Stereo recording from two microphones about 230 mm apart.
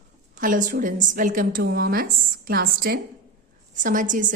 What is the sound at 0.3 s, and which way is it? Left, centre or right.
A woman's voice, right.